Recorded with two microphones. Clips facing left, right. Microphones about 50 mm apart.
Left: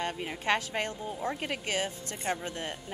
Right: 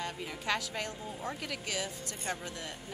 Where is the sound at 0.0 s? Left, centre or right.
Left.